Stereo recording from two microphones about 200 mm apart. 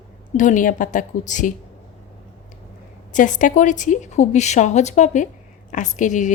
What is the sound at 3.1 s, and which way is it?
A woman's voice, 40° left (ahead or behind).